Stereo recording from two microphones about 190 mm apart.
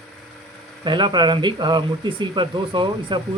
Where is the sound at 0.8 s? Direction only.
25° right (ahead or behind).